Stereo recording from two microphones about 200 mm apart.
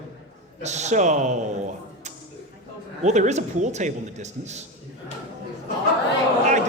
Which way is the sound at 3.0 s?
35° right (ahead or behind).